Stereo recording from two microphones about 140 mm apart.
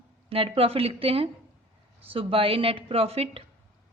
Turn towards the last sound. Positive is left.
turn(degrees=-45)  # may be behind; listen again after turning